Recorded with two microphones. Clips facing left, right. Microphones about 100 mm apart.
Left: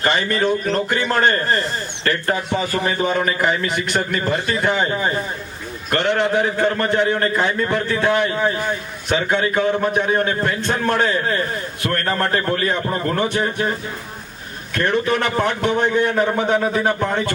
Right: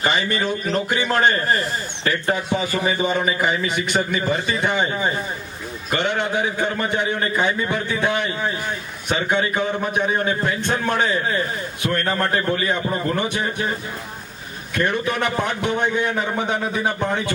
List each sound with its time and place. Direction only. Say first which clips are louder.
0.0 s a man's voice: left 3 dB; 5° right (ahead or behind)
14.8 s a man's voice: left 3 dB; 5° right (ahead or behind)